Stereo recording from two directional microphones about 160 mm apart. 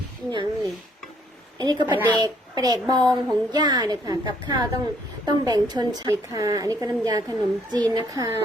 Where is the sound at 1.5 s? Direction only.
25° right (ahead or behind).